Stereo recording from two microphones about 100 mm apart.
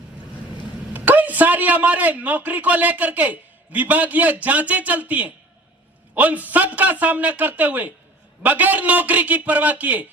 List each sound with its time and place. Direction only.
0.9 s a man's voice: 15° right (ahead or behind)